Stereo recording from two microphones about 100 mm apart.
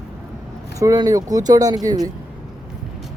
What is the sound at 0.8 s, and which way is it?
Speech, 35° right (ahead or behind).